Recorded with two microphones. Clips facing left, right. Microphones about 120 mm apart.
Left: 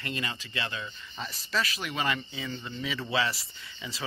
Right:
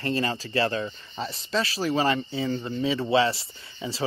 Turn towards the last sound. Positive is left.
turn(degrees=-30)  # may be behind; listen again after turning